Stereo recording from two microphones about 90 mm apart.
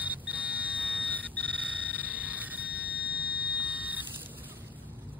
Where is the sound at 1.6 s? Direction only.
15° right (ahead or behind).